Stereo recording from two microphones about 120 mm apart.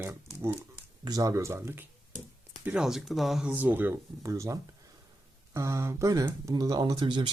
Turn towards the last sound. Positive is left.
turn(degrees=-40)  # may be behind; listen again after turning